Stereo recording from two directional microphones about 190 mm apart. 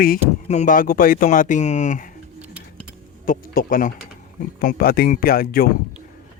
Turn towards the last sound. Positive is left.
turn(degrees=50)  # may be behind; listen again after turning